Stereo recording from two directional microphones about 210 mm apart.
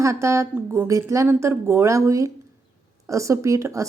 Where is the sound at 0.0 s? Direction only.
15° right (ahead or behind).